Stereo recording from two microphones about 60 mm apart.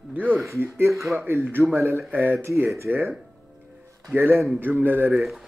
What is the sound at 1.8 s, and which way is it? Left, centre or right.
Speech, right.